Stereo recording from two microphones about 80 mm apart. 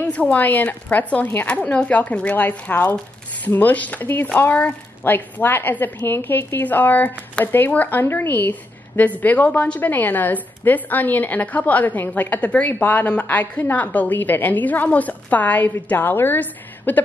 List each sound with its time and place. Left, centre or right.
0.0 s speech: centre